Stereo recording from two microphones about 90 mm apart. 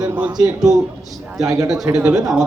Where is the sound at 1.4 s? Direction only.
40° right (ahead or behind).